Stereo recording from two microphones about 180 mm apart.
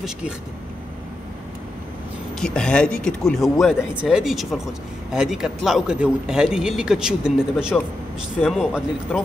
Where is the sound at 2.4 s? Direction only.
5° left (ahead or behind).